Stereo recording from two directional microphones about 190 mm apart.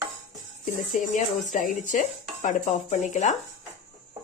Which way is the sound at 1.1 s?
40° left (ahead or behind).